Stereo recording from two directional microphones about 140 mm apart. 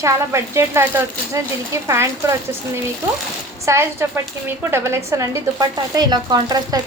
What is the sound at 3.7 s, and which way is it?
Speech, 20° right (ahead or behind).